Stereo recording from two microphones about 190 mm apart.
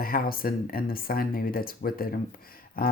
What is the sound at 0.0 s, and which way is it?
Speech, 50° left (ahead or behind).